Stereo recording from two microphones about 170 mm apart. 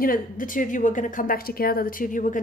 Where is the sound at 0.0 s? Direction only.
55° left (ahead or behind).